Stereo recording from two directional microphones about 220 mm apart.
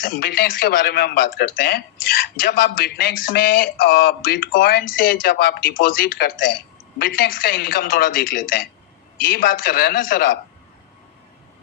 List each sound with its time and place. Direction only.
0.0 s speech: 40° left (ahead or behind)